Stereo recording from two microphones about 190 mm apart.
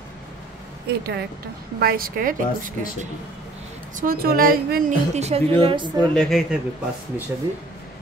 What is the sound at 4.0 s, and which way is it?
Speech, 50° right (ahead or behind).